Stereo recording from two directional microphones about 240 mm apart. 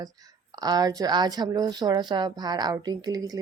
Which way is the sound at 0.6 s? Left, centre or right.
Centre.